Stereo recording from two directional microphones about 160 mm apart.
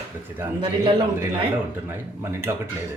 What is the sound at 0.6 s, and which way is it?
Speech, 30° right (ahead or behind).